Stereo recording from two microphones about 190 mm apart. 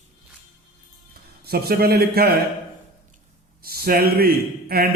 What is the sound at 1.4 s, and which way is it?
Speech, 55° right (ahead or behind).